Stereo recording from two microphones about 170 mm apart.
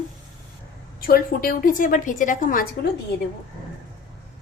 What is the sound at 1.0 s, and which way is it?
A woman's voice, 60° left (ahead or behind).